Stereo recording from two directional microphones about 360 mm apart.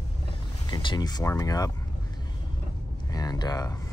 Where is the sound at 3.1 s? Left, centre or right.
Centre.